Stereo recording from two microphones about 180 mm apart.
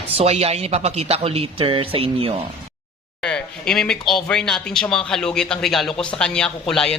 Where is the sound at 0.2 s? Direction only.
35° right (ahead or behind).